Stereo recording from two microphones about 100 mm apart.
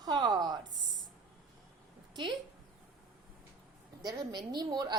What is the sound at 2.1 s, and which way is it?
Speech, 50° right (ahead or behind).